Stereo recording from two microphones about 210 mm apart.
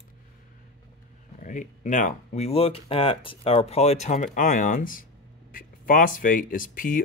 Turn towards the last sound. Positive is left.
turn(degrees=40)  # may be behind; listen again after turning